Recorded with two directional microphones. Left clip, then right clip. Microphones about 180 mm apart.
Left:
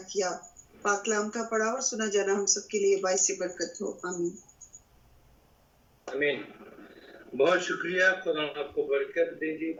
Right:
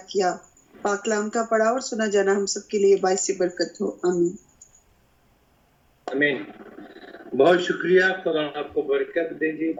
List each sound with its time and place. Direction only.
0.1 s speech: 30° right (ahead or behind)
6.1 s speech: 25° right (ahead or behind)
7.3 s speech: 25° right (ahead or behind)